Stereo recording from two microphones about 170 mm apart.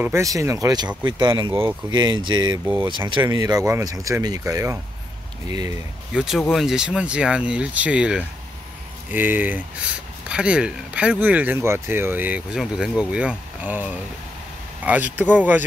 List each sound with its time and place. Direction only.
0.0 s speech: 15° right (ahead or behind)
1.5 s speech: 15° right (ahead or behind)
1.9 s speech: 25° right (ahead or behind)
6.1 s speech: centre (ahead or behind)